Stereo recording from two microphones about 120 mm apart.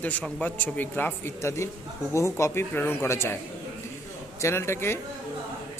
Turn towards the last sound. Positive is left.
turn(degrees=20)  # may be behind; listen again after turning